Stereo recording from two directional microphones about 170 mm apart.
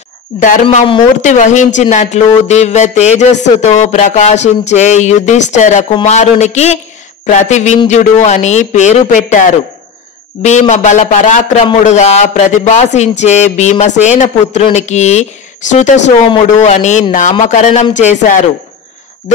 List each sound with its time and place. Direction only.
0.4 s speech: 50° left (ahead or behind)